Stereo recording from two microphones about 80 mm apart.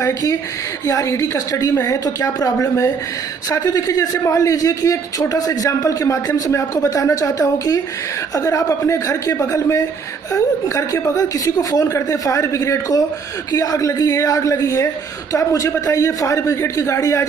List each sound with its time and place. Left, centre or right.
0.0 s a man's voice: left